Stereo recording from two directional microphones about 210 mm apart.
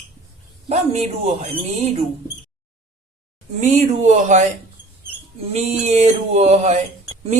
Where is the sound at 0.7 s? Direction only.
30° right (ahead or behind).